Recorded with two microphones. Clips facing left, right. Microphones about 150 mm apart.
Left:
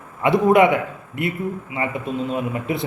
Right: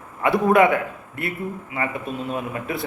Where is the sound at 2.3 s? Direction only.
20° left (ahead or behind).